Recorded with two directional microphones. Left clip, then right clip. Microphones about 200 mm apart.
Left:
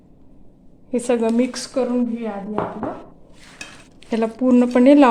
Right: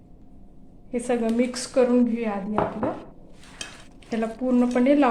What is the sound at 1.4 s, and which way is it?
Speech, 25° left (ahead or behind).